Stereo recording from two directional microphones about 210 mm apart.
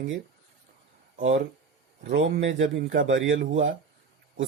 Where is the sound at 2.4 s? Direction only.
65° right (ahead or behind).